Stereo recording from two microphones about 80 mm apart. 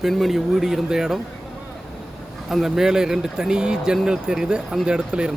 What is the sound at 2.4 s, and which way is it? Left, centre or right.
Speech, centre.